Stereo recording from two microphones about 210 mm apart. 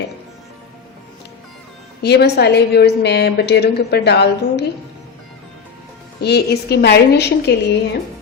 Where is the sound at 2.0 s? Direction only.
50° left (ahead or behind).